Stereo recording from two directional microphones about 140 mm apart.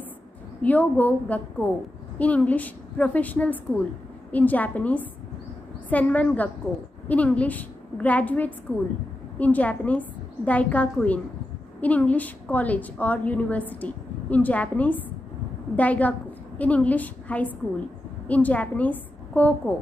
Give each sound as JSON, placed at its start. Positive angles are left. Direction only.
{"t": 0.6, "sound": "a woman's voice", "side_deg": 10}